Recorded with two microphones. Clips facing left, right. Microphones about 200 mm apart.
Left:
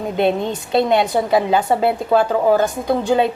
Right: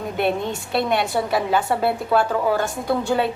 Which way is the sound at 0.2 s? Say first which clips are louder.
Left 4 dB; 20° left (ahead or behind).